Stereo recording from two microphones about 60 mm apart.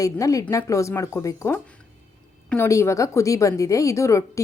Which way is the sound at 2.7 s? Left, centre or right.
Left.